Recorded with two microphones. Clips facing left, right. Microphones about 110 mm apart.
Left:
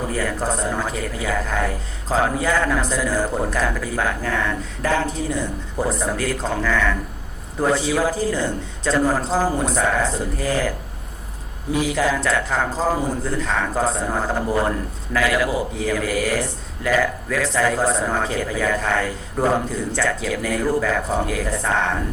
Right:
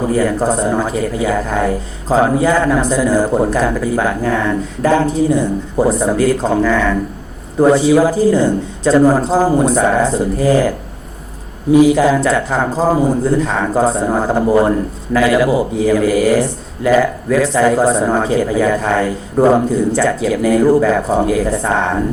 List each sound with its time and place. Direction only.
0.1 s a man's voice: 20° right (ahead or behind)